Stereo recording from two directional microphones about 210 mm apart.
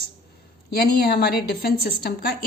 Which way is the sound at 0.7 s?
50° left (ahead or behind).